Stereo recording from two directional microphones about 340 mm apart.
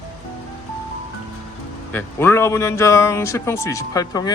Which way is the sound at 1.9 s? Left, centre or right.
Centre.